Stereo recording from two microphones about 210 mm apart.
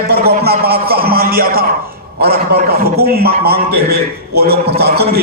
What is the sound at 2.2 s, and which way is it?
A man's voice, 50° right (ahead or behind).